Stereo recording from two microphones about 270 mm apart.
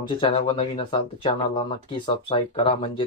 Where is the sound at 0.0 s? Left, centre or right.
Centre.